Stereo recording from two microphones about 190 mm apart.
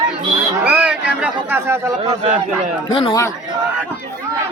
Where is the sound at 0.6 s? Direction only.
5° right (ahead or behind).